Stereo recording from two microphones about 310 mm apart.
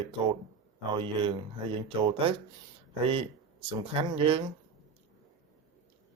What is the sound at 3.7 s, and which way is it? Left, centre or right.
Speech, centre.